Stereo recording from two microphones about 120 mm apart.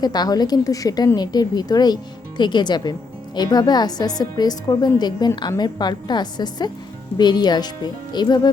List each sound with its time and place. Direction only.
0.0 s a woman's voice: 35° left (ahead or behind)